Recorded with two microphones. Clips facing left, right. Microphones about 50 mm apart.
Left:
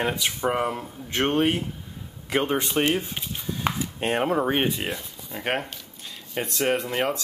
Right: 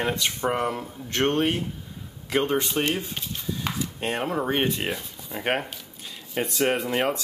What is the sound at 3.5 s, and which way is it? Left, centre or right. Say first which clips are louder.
Chopping: left 3 dB; left.